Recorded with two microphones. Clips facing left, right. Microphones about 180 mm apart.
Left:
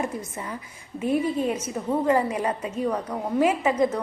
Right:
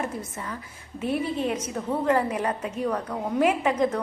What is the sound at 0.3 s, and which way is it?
A woman's voice, 15° left (ahead or behind).